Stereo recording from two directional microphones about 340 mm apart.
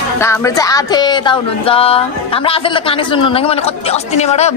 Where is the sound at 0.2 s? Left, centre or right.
Centre.